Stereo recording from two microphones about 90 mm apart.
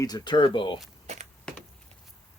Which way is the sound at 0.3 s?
60° left (ahead or behind).